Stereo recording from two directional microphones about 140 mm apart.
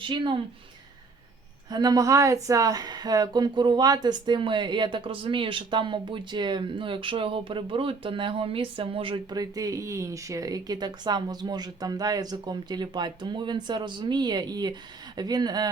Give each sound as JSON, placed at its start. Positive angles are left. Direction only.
{"t": 0.0, "sound": "speech", "side_deg": -35}
{"t": 1.7, "sound": "speech", "side_deg": -30}